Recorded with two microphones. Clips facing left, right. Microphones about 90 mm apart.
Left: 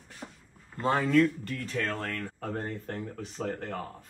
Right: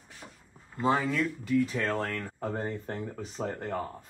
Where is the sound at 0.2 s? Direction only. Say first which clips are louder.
Left 5 dB; 20° left (ahead or behind).